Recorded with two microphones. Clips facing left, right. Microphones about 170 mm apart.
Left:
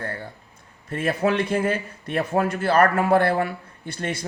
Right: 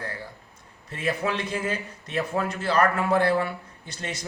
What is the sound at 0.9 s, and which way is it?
A man's voice, 50° left (ahead or behind).